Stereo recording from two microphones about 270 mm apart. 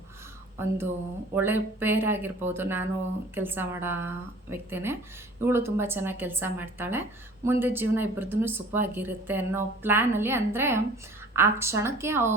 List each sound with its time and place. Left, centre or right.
0.6 s speech: centre